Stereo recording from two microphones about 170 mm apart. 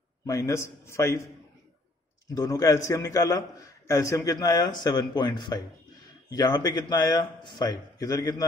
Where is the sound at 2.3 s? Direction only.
20° left (ahead or behind).